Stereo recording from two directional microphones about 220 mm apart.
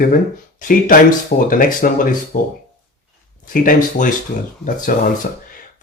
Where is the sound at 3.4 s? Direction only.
40° left (ahead or behind).